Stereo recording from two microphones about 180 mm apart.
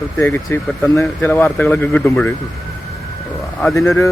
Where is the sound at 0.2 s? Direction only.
10° left (ahead or behind).